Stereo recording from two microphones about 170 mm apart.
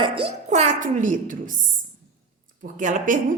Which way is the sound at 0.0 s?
35° right (ahead or behind).